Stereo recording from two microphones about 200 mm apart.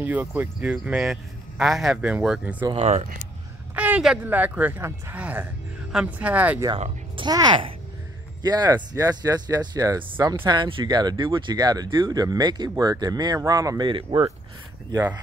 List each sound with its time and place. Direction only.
0.0 s speech: 10° right (ahead or behind)
2.6 s speech: 30° right (ahead or behind)
3.7 s speech: 5° right (ahead or behind)
6.8 s speech: 25° right (ahead or behind)
14.9 s speech: 10° right (ahead or behind)